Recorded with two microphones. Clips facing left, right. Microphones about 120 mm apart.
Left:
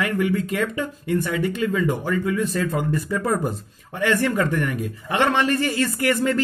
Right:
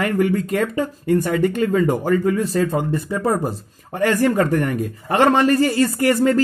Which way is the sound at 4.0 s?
40° right (ahead or behind).